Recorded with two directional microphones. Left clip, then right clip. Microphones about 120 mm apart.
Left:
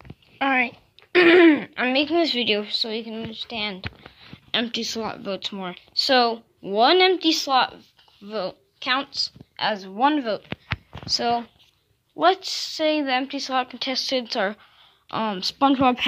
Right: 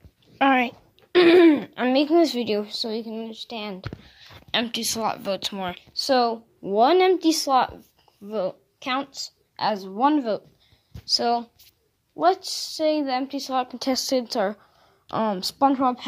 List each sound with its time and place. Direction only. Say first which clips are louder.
0.4 s a sound: right 3 dB; 50° right (ahead or behind)
1.1 s speech: left 1 dB; 15° right (ahead or behind)
1.7 s speech: right 1 dB; 45° right (ahead or behind)
2.3 s a woman's voice: left 3 dB; 30° right (ahead or behind)
3.2 s a woman's voice: left 3 dB; 20° right (ahead or behind)
5.2 s speech: right 2 dB; 5° right (ahead or behind)
6.7 s a woman's voice: left 1 dB; 25° right (ahead or behind)
7.2 s speech: even; 50° right (ahead or behind)
8.3 s a woman's voice: right 2 dB; 30° right (ahead or behind)
9.8 s a woman's voice: left 1 dB; 15° right (ahead or behind)
12.2 s a woman's voice: left 1 dB; 5° right (ahead or behind)
13.7 s speech: even; 65° right (ahead or behind)
14.1 s a woman's voice: even; 35° right (ahead or behind)